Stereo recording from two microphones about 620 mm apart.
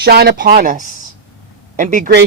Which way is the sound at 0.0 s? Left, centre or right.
Centre.